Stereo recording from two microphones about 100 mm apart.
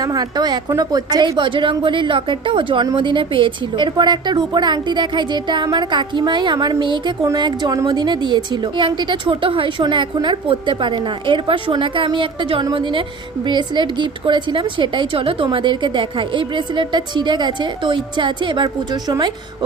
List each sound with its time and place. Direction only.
0.0 s speech: 35° right (ahead or behind)
1.4 s a woman's voice: 55° right (ahead or behind)
15.5 s a woman's voice: 50° right (ahead or behind)